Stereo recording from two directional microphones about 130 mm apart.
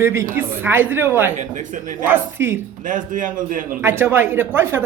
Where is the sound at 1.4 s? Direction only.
75° right (ahead or behind).